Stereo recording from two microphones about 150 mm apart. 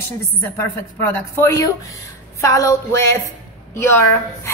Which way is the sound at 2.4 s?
20° left (ahead or behind).